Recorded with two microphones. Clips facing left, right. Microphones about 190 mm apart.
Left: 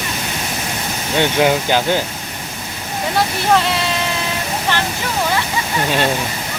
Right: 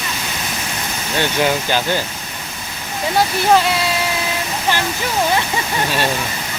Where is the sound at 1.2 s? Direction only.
15° left (ahead or behind).